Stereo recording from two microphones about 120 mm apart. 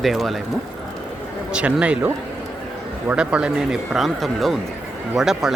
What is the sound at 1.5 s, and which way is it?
Speech, 10° right (ahead or behind).